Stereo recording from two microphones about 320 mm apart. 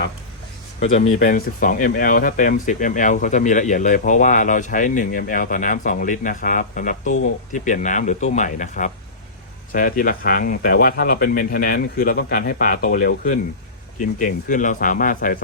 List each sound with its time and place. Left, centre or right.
1.2 s speech: left